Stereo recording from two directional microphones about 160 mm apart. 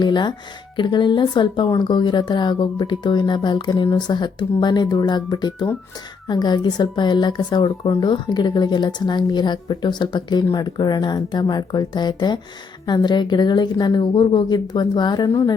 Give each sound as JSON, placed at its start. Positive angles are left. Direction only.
{"t": 0.0, "sound": "speech", "side_deg": 30}